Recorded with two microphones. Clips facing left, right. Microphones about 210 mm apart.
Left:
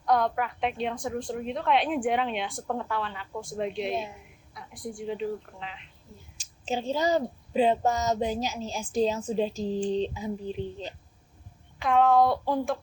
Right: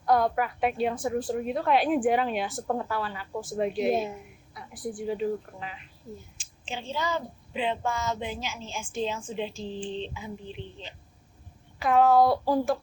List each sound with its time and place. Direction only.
0.0 s a woman's voice: 5° right (ahead or behind)
6.3 s a woman's voice: 40° left (ahead or behind)
11.8 s a woman's voice: 5° right (ahead or behind)